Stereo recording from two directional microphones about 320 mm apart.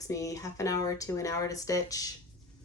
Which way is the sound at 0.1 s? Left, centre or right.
Centre.